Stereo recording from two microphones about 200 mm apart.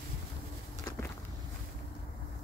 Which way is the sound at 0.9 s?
20° left (ahead or behind).